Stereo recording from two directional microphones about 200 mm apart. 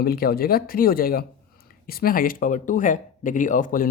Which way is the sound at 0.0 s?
50° left (ahead or behind).